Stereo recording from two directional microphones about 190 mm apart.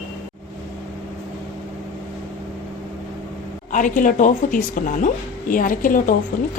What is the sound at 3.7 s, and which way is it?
A woman's voice, 40° left (ahead or behind).